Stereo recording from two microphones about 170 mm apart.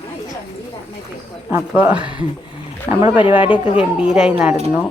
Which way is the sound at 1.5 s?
10° right (ahead or behind).